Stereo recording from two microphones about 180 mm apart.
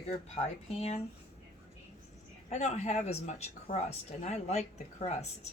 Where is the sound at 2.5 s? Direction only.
40° left (ahead or behind).